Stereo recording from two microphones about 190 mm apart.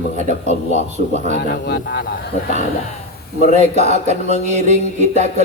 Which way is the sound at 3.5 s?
35° right (ahead or behind).